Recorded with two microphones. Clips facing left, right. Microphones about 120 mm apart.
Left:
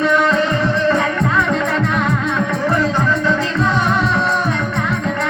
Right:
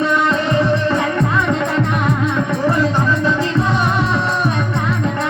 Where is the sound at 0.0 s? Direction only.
20° right (ahead or behind).